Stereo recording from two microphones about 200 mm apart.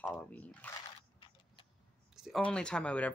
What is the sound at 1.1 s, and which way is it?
Tick-tock, 25° left (ahead or behind).